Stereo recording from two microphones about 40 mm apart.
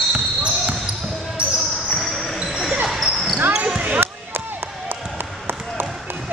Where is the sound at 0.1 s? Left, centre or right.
Right.